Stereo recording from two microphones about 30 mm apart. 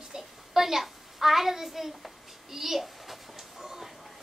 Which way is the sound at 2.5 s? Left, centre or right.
Centre.